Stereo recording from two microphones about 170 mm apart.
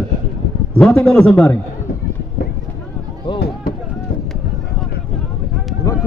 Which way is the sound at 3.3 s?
70° left (ahead or behind).